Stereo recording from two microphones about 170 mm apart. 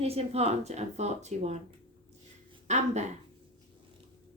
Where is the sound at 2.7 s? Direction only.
45° right (ahead or behind).